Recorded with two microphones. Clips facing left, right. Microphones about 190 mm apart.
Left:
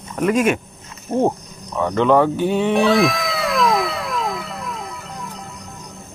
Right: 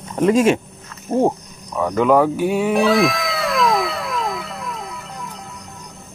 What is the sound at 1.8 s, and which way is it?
Cat, 5° right (ahead or behind).